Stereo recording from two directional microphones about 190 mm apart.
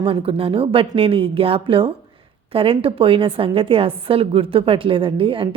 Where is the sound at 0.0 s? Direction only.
30° right (ahead or behind).